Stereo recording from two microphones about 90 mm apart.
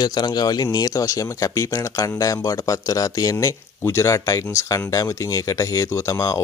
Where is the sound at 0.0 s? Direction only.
50° left (ahead or behind).